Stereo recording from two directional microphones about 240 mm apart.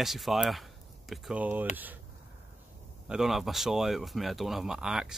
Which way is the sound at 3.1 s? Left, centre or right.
Centre.